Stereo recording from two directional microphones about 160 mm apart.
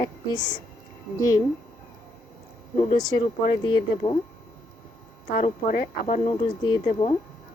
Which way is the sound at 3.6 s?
30° left (ahead or behind).